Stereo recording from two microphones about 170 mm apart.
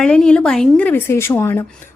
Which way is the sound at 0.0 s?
5° left (ahead or behind).